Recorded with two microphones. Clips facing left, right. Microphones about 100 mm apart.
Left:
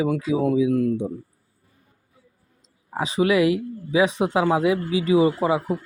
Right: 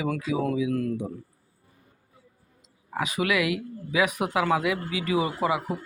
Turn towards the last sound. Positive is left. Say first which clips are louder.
# left 6 dB
turn(degrees=30)  # may be behind; listen again after turning